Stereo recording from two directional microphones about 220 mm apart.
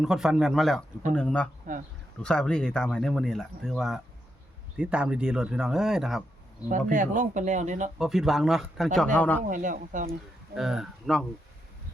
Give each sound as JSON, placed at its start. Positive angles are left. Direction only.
{"t": 0.0, "sound": "speech", "side_deg": 0}
{"t": 1.7, "sound": "speech", "side_deg": -40}
{"t": 2.2, "sound": "speech", "side_deg": 5}
{"t": 6.7, "sound": "speech", "side_deg": -35}
{"t": 7.9, "sound": "speech", "side_deg": 0}
{"t": 9.5, "sound": "speech", "side_deg": -35}
{"t": 10.5, "sound": "speech", "side_deg": 0}